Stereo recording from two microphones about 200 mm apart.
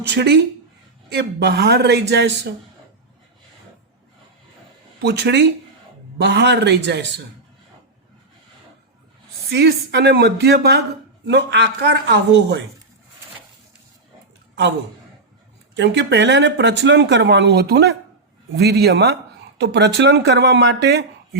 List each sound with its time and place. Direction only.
0.1 s speech: 55° right (ahead or behind)
5.0 s speech: 55° right (ahead or behind)
9.5 s speech: 55° right (ahead or behind)
15.7 s a man's voice: 60° right (ahead or behind)